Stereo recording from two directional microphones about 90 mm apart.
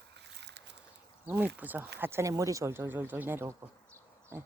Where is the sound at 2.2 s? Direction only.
40° right (ahead or behind).